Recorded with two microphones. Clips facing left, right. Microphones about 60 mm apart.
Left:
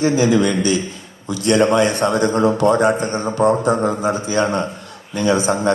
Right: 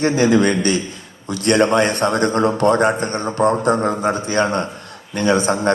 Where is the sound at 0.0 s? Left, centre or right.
Right.